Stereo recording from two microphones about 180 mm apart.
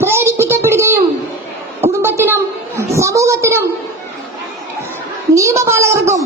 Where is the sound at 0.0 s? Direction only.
15° right (ahead or behind).